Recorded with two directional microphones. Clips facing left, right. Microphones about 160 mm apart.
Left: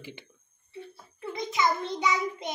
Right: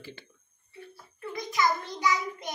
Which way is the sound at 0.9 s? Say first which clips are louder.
Right 1 dB; 25° left (ahead or behind).